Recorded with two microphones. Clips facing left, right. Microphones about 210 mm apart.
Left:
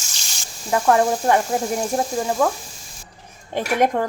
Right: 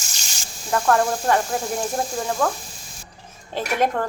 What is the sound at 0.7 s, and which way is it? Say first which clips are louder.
Speech: left 2 dB; 10° left (ahead or behind).